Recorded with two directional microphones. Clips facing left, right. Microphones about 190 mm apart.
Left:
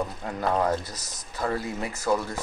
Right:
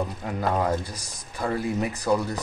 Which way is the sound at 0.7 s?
15° right (ahead or behind).